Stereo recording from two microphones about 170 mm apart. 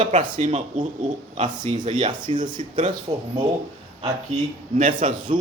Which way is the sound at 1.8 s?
45° right (ahead or behind).